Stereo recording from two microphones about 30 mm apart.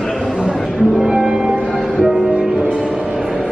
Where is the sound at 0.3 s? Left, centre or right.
Right.